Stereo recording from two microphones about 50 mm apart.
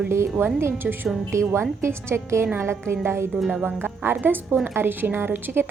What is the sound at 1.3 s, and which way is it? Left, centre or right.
Speech, right.